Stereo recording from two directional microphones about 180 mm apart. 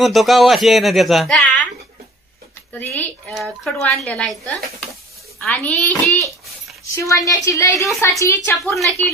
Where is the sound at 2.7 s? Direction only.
10° left (ahead or behind).